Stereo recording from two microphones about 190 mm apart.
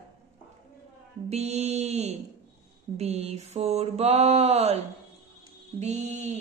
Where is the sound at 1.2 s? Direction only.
35° right (ahead or behind).